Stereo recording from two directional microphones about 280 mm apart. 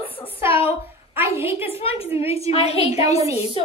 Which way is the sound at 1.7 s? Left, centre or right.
Left.